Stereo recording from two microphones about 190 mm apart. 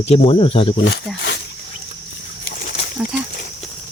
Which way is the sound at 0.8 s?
90° left.